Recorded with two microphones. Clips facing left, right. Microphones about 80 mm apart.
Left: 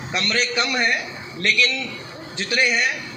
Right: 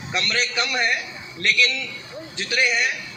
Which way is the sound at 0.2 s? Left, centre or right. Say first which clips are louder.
Left 2 dB; left.